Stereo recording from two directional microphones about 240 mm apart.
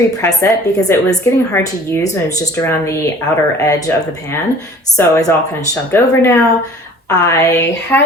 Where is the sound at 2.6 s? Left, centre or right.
Centre.